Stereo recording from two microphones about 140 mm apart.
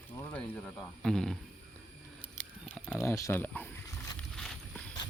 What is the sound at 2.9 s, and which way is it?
Speech, 20° left (ahead or behind).